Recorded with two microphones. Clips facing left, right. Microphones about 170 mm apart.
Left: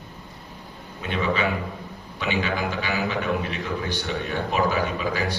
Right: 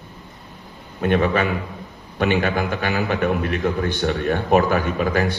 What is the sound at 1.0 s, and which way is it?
A man's voice, 55° right (ahead or behind).